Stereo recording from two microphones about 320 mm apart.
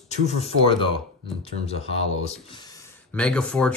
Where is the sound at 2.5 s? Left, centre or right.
Centre.